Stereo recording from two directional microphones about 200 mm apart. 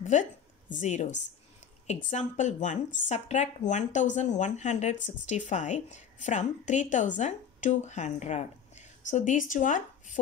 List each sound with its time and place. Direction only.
0.0 s a woman's voice: 40° left (ahead or behind)